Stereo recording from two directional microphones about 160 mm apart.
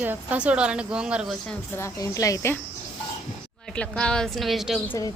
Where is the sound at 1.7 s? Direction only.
20° left (ahead or behind).